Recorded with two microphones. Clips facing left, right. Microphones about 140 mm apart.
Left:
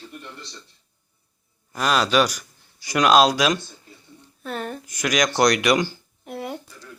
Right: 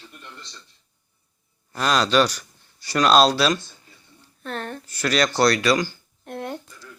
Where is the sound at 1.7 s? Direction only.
5° left (ahead or behind).